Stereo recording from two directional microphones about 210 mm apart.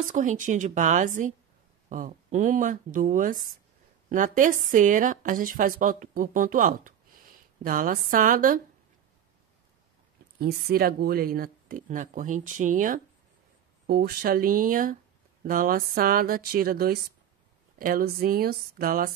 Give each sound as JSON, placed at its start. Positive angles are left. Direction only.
{"t": 0.1, "sound": "a woman's voice", "side_deg": -40}
{"t": 10.4, "sound": "a woman's voice", "side_deg": -45}